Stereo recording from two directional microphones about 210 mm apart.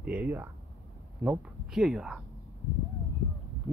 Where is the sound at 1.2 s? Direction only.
5° right (ahead or behind).